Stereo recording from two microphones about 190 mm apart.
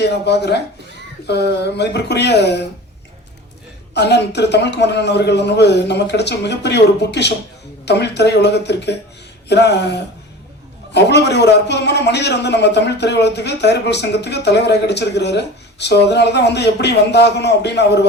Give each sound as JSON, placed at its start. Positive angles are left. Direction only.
{"t": 0.0, "sound": "a man's voice", "side_deg": 60}
{"t": 3.9, "sound": "a man's voice", "side_deg": 60}